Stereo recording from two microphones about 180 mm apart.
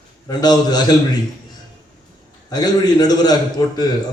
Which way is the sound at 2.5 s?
20° left (ahead or behind).